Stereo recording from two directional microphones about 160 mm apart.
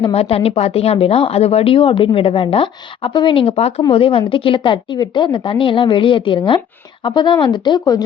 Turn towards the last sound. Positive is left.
turn(degrees=25)  # may be behind; listen again after turning